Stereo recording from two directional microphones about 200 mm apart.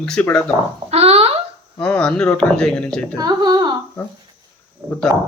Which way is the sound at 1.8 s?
5° left (ahead or behind).